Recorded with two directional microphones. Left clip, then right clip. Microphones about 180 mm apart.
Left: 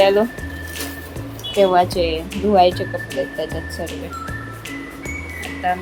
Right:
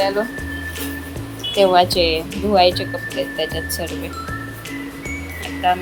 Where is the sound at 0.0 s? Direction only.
30° left (ahead or behind).